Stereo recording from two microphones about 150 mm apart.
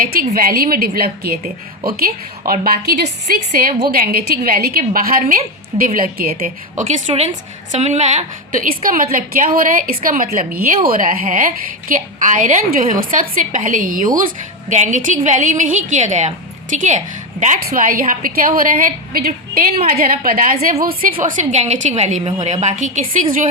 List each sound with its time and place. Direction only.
0.0 s a woman's voice: 75° right (ahead or behind)
14.7 s a woman's voice: 55° right (ahead or behind)
17.7 s a woman's voice: 65° right (ahead or behind)
21.2 s a woman's voice: 50° right (ahead or behind)